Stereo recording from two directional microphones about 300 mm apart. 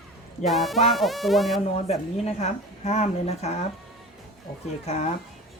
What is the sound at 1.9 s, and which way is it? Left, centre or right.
Speech, left.